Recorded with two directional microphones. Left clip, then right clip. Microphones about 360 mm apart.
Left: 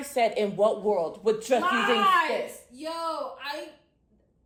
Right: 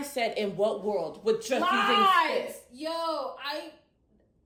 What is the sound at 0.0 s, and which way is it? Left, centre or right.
A man's voice, centre.